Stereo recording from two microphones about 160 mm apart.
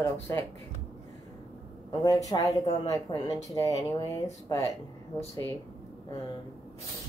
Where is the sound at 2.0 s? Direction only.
20° left (ahead or behind).